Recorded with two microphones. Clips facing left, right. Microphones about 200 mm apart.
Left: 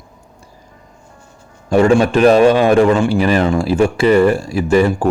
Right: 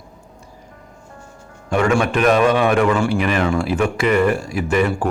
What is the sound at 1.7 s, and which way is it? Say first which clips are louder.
Speech: left 6 dB; 35° left (ahead or behind).